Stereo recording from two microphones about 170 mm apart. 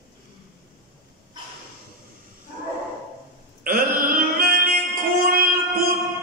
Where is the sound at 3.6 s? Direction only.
60° right (ahead or behind).